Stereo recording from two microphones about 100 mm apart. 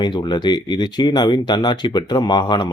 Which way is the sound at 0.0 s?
50° left (ahead or behind).